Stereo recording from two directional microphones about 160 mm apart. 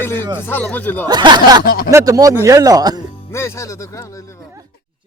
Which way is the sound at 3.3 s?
15° left (ahead or behind).